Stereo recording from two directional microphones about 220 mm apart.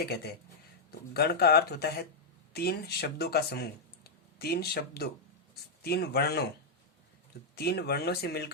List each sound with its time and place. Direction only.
0.0 s speech: 45° left (ahead or behind)
7.5 s speech: 45° left (ahead or behind)